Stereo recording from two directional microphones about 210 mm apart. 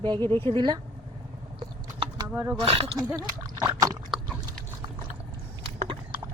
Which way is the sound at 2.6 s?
30° right (ahead or behind).